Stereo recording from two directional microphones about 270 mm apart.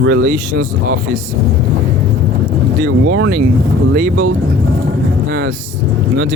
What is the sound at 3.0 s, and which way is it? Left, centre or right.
Speech, right.